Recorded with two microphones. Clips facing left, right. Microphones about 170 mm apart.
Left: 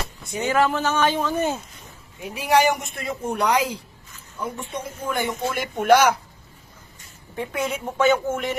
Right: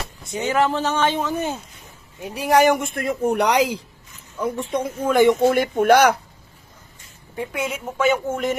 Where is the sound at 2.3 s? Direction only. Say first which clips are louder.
Right 3 dB; 45° right (ahead or behind); by 5.5 s 90° right.